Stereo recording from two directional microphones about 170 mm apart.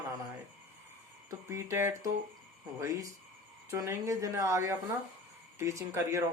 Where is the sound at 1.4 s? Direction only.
15° right (ahead or behind).